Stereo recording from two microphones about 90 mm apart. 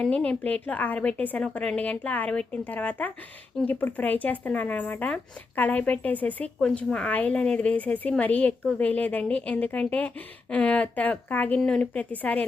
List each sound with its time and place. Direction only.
0.0 s speech: 10° left (ahead or behind)